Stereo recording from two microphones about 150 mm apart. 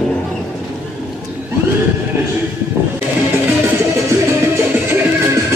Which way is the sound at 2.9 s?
15° right (ahead or behind).